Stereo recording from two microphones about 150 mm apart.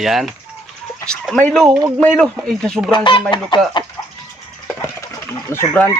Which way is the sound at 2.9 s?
30° left (ahead or behind).